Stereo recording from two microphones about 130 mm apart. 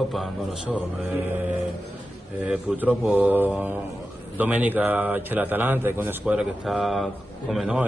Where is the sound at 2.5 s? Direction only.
10° right (ahead or behind).